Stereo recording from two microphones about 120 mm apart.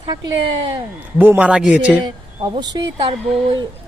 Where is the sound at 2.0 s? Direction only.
40° right (ahead or behind).